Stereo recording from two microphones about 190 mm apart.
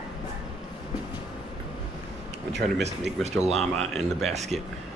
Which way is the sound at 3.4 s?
Centre (ahead or behind).